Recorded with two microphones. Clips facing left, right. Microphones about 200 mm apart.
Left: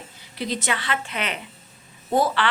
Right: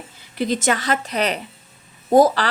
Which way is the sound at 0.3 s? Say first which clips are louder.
Right 7 dB; 45° right (ahead or behind).